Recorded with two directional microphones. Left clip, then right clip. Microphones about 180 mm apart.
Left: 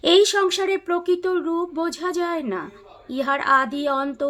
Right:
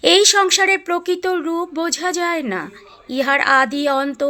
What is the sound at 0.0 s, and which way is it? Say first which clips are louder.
Speech: right 4 dB; 15° right (ahead or behind).